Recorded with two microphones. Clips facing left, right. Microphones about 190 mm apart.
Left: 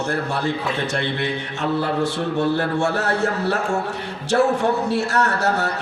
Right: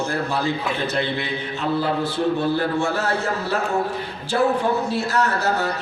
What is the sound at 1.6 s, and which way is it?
A man's voice, 75° left (ahead or behind).